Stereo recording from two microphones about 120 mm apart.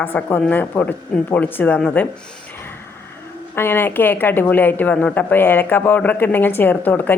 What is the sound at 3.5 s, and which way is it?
Speech, 20° left (ahead or behind).